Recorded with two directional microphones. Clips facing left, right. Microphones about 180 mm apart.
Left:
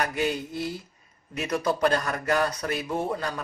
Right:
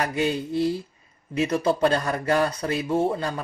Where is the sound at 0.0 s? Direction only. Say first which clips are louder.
Right 3 dB; 30° right (ahead or behind).